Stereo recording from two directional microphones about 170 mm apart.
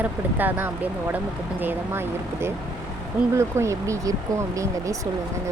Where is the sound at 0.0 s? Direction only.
10° right (ahead or behind).